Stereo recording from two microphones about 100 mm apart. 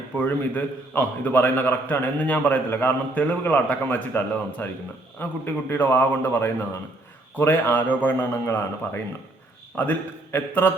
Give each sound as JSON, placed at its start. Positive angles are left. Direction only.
{"t": 0.2, "sound": "a man's voice", "side_deg": 15}